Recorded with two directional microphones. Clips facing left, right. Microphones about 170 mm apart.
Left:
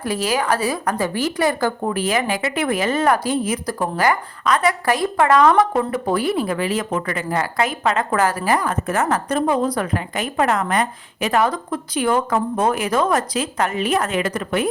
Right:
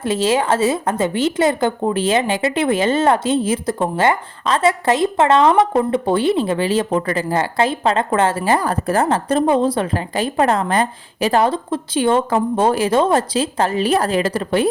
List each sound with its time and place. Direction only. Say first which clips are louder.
0.0 s speech: right 4 dB; 25° right (ahead or behind)